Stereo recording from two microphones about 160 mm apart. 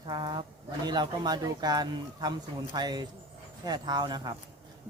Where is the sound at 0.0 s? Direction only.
30° right (ahead or behind).